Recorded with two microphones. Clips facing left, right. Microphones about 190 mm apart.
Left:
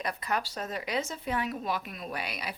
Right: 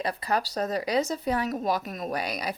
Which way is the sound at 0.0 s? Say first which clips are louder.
Right 4 dB; 30° right (ahead or behind).